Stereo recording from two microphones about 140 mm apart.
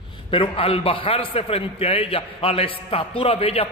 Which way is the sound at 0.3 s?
40° left (ahead or behind).